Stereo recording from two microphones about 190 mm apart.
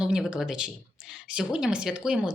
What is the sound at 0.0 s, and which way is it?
Speech, 5° right (ahead or behind).